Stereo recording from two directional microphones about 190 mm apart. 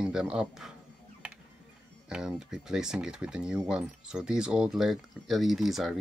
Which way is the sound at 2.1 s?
5° right (ahead or behind).